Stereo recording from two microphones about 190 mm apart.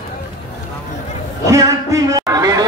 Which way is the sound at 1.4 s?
15° right (ahead or behind).